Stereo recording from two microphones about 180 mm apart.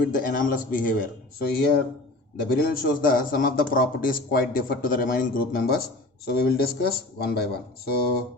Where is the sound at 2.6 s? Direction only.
55° left (ahead or behind).